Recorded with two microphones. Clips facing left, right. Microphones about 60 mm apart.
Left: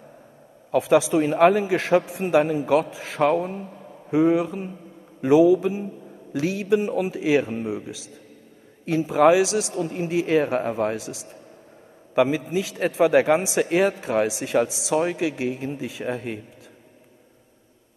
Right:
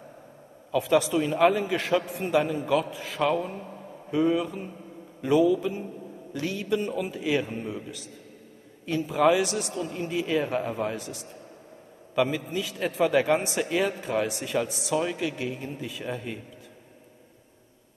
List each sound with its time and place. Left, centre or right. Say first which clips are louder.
0.7 s a man's voice: left 4 dB; left
1.1 s a man's voice: left 5 dB; left
3.2 s speech: left 5 dB; left
4.1 s a man's voice: left 5 dB; left
8.8 s speech: left 5 dB; left
9.8 s speech: left 4 dB; left
10.2 s speech: left 5 dB; left
11.0 s a man's voice: left 3 dB; left
12.2 s a man's voice: left 5 dB; left
14.0 s a man's voice: left 5 dB; left
15.2 s speech: left 5 dB; left
16.0 s a man's voice: left 5 dB; left